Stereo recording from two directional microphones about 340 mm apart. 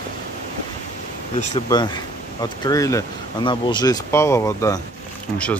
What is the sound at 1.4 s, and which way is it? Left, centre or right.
Speech, centre.